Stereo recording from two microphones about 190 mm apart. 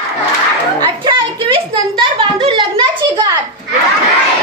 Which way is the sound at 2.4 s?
25° right (ahead or behind).